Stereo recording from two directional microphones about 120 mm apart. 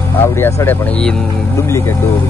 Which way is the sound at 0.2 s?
20° left (ahead or behind).